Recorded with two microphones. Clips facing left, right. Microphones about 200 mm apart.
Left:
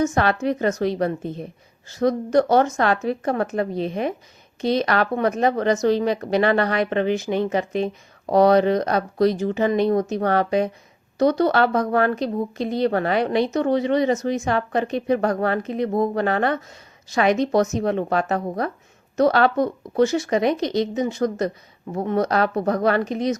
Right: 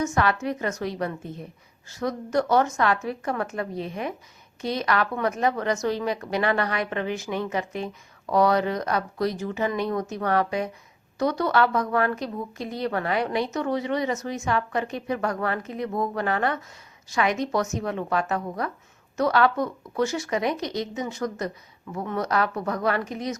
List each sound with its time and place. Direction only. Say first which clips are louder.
0.0 s a woman's voice: left 4 dB; 35° left (ahead or behind)